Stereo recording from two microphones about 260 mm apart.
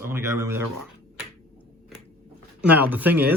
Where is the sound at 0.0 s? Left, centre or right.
Centre.